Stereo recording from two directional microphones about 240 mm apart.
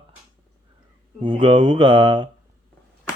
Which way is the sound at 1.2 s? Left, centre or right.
Right.